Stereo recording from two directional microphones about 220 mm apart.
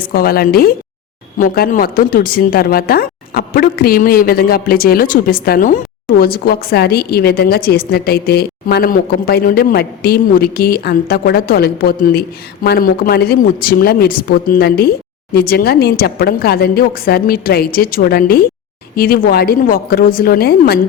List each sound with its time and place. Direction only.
0.1 s a woman's voice: 40° left (ahead or behind)